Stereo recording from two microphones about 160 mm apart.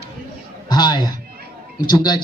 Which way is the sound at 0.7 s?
25° left (ahead or behind).